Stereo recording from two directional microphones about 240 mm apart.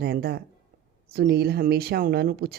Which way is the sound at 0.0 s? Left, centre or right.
Right.